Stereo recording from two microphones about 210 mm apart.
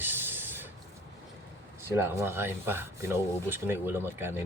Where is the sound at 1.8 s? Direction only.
10° right (ahead or behind).